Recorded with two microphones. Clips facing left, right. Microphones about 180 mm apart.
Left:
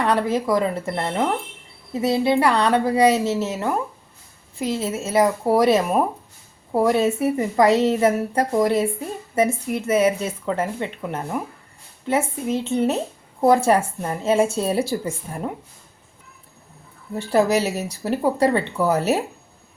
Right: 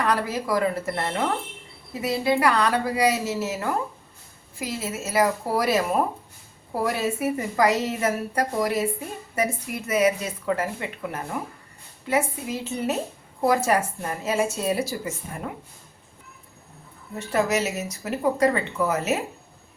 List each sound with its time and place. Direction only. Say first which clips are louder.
0.0 s a woman's voice: left 4 dB; 25° left (ahead or behind)
17.2 s a woman's voice: left 5 dB; 35° left (ahead or behind)